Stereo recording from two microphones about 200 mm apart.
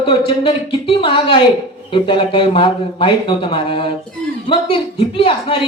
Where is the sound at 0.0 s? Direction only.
25° left (ahead or behind).